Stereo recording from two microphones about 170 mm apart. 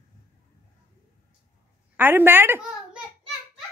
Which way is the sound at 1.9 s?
10° right (ahead or behind).